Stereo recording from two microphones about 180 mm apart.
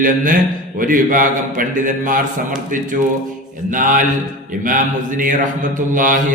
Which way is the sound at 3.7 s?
45° right (ahead or behind).